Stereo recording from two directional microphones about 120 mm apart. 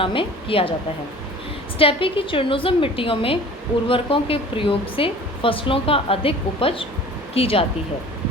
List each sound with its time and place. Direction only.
0.0 s speech: 45° left (ahead or behind)
1.8 s speech: 50° left (ahead or behind)